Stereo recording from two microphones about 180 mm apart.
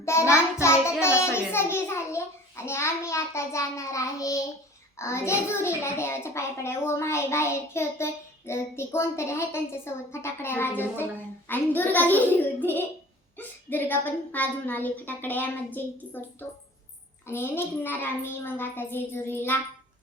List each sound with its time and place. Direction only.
0.0 s a child's voice: 15° left (ahead or behind)